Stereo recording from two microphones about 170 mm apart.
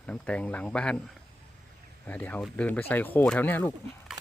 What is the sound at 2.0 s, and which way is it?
Speech, 10° left (ahead or behind).